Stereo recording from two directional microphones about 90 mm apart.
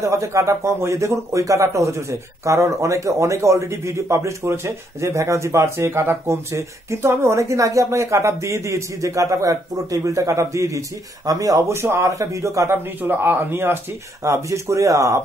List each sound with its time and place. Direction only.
0.0 s a man's voice: 35° right (ahead or behind)